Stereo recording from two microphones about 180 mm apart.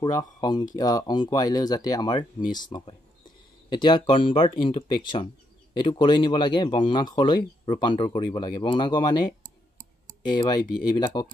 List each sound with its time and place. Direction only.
0.0 s speech: 20° left (ahead or behind)
10.3 s speech: 25° left (ahead or behind)